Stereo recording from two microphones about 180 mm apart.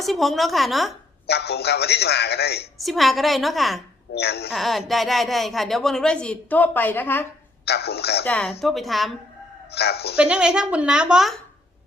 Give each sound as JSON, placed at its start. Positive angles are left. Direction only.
{"t": 0.0, "sound": "speech", "side_deg": 0}
{"t": 1.3, "sound": "a man's voice", "side_deg": 65}
{"t": 2.8, "sound": "speech", "side_deg": 0}
{"t": 4.1, "sound": "a man's voice", "side_deg": 65}
{"t": 4.5, "sound": "speech", "side_deg": 0}
{"t": 7.6, "sound": "a man's voice", "side_deg": 65}
{"t": 8.2, "sound": "speech", "side_deg": 5}
{"t": 9.7, "sound": "a man's voice", "side_deg": 65}
{"t": 10.2, "sound": "speech", "side_deg": -5}